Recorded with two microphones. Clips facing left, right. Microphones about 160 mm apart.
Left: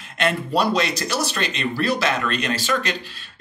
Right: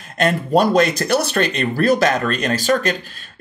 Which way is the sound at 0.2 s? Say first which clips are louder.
Right 5 dB; 45° right (ahead or behind).